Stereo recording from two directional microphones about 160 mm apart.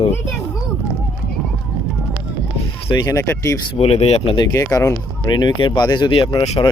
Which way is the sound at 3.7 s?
40° left (ahead or behind).